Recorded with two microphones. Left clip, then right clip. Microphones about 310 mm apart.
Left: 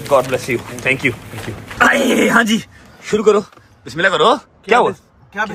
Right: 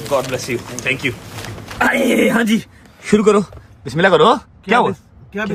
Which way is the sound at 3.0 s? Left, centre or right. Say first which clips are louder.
Even; right.